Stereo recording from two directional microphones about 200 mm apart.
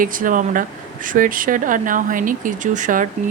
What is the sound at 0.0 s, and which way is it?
Speech, 40° right (ahead or behind).